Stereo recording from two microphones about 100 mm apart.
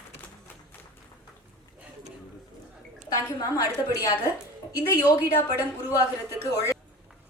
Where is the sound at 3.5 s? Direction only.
35° left (ahead or behind).